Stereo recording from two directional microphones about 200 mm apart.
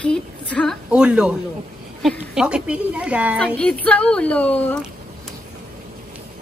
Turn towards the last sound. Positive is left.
turn(degrees=5)  # may be behind; listen again after turning